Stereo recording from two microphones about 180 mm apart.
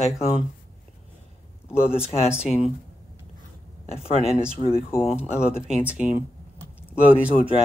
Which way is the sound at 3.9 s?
35° left (ahead or behind).